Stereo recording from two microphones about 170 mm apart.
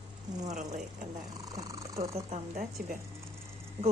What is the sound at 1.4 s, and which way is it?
Purr, 20° right (ahead or behind).